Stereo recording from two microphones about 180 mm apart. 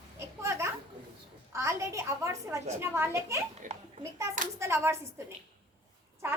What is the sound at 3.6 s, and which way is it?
Speech, 45° right (ahead or behind).